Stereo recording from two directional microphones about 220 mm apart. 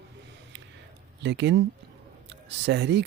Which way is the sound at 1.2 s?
50° right (ahead or behind).